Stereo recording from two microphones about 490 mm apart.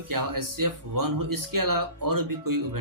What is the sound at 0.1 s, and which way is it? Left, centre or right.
Speech, right.